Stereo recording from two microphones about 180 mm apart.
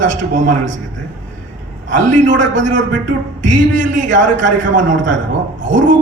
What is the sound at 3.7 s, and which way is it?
A man's voice, 45° right (ahead or behind).